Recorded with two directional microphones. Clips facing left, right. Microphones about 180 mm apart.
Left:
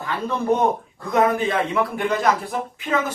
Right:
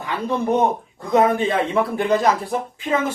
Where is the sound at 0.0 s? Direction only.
15° right (ahead or behind).